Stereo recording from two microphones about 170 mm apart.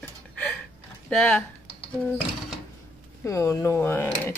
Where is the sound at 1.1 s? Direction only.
5° left (ahead or behind).